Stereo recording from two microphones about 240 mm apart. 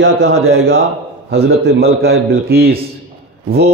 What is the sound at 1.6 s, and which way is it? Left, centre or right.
A man's voice, right.